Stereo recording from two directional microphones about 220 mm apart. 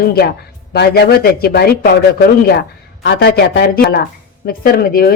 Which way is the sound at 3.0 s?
45° left (ahead or behind).